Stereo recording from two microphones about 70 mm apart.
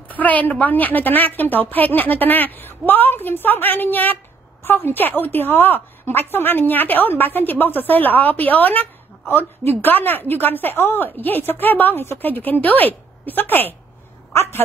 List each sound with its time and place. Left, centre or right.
0.1 s a woman's voice: left